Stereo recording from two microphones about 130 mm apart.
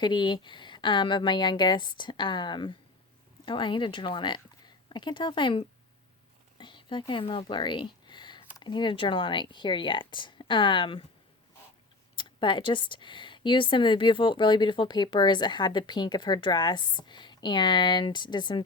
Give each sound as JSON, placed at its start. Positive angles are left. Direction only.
{"t": 0.0, "sound": "speech", "side_deg": 35}
{"t": 6.6, "sound": "a sound", "side_deg": 40}
{"t": 7.1, "sound": "speech", "side_deg": 40}
{"t": 12.1, "sound": "speech", "side_deg": 40}